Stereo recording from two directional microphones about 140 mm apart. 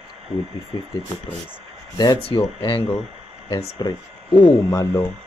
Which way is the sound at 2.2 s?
40° left (ahead or behind).